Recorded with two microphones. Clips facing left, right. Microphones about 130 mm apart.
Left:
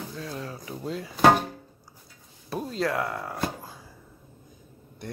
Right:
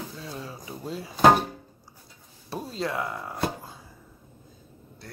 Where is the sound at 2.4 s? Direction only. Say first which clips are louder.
Left 3 dB; centre (ahead or behind).